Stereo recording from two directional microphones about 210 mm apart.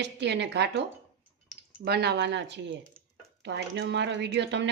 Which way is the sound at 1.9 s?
50° right (ahead or behind).